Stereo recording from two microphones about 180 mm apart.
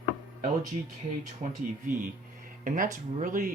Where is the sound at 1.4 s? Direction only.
40° right (ahead or behind).